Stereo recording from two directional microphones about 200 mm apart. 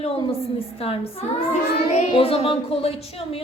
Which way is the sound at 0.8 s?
30° left (ahead or behind).